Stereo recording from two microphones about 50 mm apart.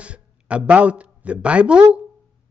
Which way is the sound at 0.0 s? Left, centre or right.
Right.